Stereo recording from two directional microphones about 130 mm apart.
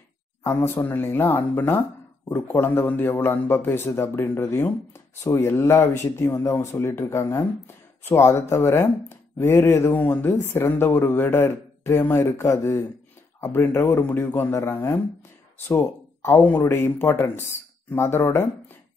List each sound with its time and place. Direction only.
0.4 s speech: 20° left (ahead or behind)